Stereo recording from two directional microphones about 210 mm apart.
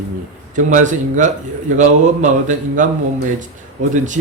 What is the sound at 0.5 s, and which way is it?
Speech, 35° right (ahead or behind).